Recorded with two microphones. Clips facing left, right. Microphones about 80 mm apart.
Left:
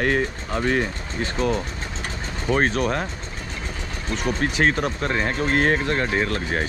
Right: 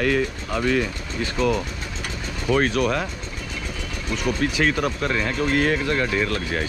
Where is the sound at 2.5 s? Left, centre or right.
Left.